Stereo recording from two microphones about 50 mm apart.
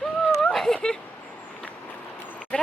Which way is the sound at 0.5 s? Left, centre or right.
Centre.